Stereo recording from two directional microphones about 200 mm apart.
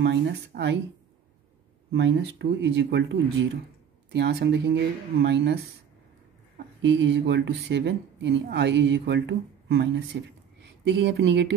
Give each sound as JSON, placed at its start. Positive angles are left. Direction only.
{"t": 0.0, "sound": "speech", "side_deg": -60}
{"t": 1.9, "sound": "speech", "side_deg": -60}
{"t": 6.8, "sound": "speech", "side_deg": -65}